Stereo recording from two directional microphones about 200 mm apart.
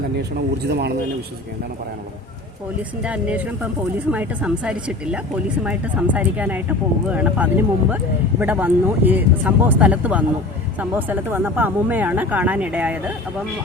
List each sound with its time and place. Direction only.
0.7 s a man's voice: 55° right (ahead or behind)
3.0 s speech: 5° right (ahead or behind)